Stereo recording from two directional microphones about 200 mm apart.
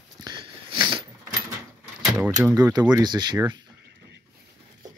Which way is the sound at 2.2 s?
10° right (ahead or behind).